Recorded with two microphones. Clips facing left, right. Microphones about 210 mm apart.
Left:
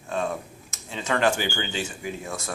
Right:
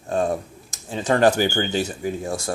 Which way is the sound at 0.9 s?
40° right (ahead or behind).